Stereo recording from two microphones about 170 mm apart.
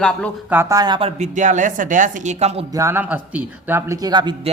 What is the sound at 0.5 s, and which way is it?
Speech, 15° right (ahead or behind).